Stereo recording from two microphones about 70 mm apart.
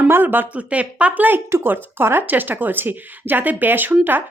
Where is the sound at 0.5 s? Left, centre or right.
Centre.